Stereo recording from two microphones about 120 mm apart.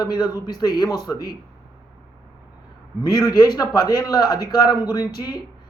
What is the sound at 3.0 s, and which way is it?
Speech, 35° left (ahead or behind).